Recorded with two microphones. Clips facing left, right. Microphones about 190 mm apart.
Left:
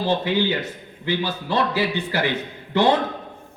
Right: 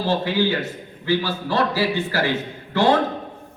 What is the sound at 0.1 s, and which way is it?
A man's voice, 20° left (ahead or behind).